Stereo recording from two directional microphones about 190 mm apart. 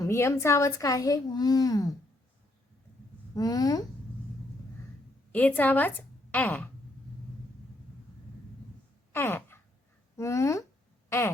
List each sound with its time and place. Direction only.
0.0 s a child's voice: 15° left (ahead or behind)
3.3 s speech: 20° left (ahead or behind)
5.3 s a woman's voice: 10° left (ahead or behind)
9.1 s a sound: 10° left (ahead or behind)
10.2 s a child's voice: 15° left (ahead or behind)